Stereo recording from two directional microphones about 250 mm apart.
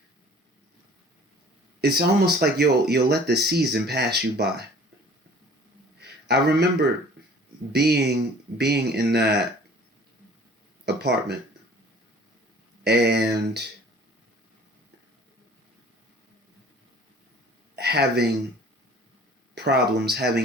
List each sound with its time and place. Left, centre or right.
1.8 s speech: right
6.0 s a sound: right
7.7 s speech: right
10.8 s speech: right
12.8 s speech: right
17.7 s speech: right
19.5 s speech: right